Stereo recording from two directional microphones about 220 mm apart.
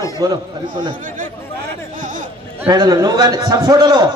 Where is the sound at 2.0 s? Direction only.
35° right (ahead or behind).